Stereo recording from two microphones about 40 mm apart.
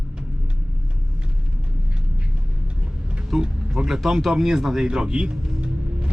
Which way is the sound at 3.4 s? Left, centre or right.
Right.